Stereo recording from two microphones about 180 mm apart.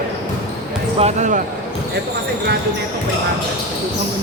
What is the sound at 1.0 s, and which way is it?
Speech, 40° right (ahead or behind).